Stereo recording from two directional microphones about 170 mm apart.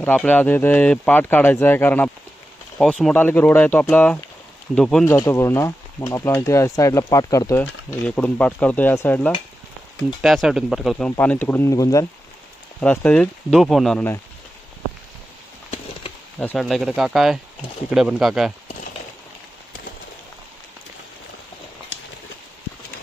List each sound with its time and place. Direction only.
0.0 s speech: 10° left (ahead or behind)
5.0 s speech: 15° left (ahead or behind)
8.1 s speech: 5° left (ahead or behind)
10.2 s speech: centre (ahead or behind); by 12.1 s 20° left (ahead or behind)
12.8 s speech: 10° left (ahead or behind)
16.3 s speech: 5° left (ahead or behind)